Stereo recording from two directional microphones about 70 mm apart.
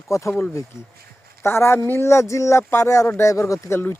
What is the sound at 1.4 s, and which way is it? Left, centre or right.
Speech, left.